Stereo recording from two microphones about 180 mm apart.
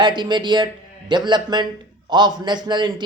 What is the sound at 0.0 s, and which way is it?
Speech, 25° right (ahead or behind).